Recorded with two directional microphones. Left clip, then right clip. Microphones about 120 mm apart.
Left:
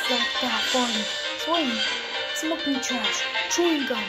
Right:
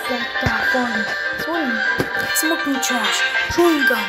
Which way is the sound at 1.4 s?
Centre (ahead or behind).